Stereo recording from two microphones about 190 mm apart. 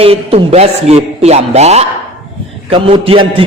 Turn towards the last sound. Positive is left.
turn(degrees=-30)  # may be behind; listen again after turning